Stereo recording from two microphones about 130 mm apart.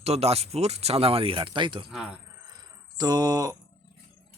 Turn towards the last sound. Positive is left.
turn(degrees=-30)  # may be behind; listen again after turning